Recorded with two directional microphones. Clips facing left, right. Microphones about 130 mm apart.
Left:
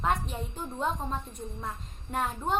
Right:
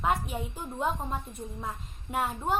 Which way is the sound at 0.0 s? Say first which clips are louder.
Right 1 dB; 5° right (ahead or behind).